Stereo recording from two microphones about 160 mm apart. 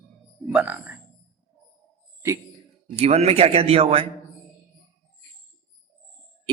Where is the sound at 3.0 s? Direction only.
40° right (ahead or behind).